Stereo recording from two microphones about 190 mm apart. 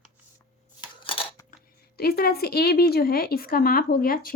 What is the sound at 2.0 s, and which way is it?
A woman's voice, 55° left (ahead or behind).